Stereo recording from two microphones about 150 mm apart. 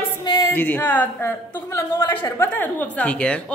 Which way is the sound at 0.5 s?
10° left (ahead or behind).